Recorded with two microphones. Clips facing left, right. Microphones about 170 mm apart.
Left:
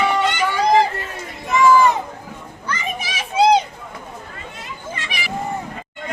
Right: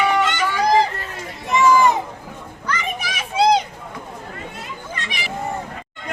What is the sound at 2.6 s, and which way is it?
Children playing, 25° left (ahead or behind).